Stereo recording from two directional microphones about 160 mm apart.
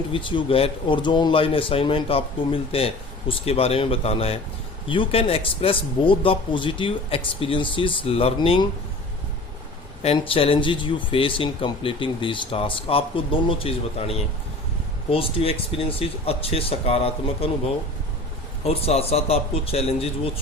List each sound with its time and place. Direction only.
0.1 s speech: 30° left (ahead or behind)
10.0 s speech: 35° left (ahead or behind)
18.6 s speech: 40° left (ahead or behind)